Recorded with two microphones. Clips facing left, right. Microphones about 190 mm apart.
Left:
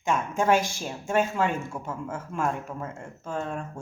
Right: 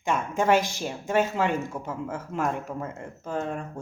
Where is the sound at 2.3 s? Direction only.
20° right (ahead or behind).